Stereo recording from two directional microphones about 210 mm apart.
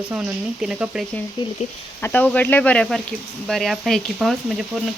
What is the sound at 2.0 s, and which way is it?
Speech, 5° left (ahead or behind).